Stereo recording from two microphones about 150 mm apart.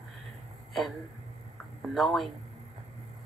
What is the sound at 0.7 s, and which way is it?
Speech, centre (ahead or behind).